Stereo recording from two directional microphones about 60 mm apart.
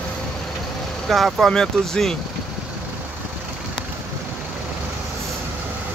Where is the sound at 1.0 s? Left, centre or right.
Centre.